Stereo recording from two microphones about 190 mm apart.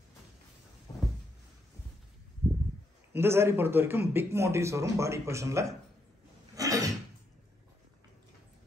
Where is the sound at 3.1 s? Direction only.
15° right (ahead or behind).